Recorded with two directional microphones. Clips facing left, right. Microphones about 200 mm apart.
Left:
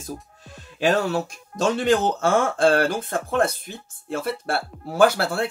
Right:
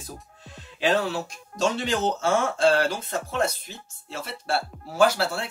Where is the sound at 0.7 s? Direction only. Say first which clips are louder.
Left 3 dB; 50° left (ahead or behind).